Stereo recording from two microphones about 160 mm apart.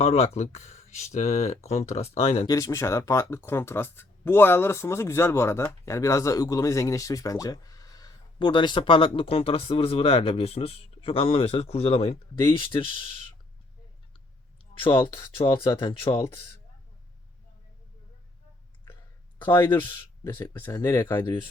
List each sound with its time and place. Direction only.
0.0 s speech: 40° left (ahead or behind)
2.5 s speech: 20° left (ahead or behind)
15.0 s speech: 30° left (ahead or behind)
19.6 s speech: 30° left (ahead or behind)
20.6 s speech: 15° left (ahead or behind)